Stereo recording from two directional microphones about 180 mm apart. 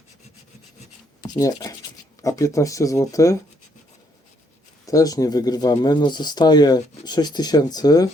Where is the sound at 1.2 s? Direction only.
20° left (ahead or behind).